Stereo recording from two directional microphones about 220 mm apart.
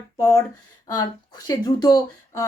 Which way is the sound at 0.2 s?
15° left (ahead or behind).